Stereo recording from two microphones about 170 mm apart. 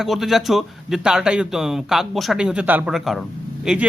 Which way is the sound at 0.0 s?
Centre (ahead or behind).